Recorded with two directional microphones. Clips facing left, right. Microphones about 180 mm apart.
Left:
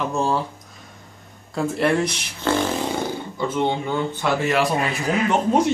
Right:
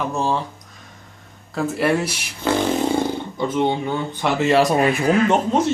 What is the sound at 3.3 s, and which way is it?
Speech, 15° right (ahead or behind).